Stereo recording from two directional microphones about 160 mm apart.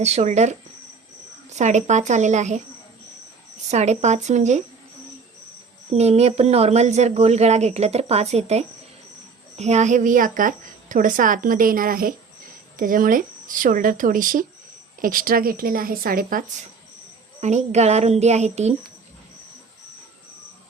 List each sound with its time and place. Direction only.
0.0 s speech: 45° right (ahead or behind)
3.7 s speech: 45° right (ahead or behind)
5.9 s a woman's voice: 40° right (ahead or behind); by 16.4 s 65° right (ahead or behind)
17.4 s speech: 45° right (ahead or behind)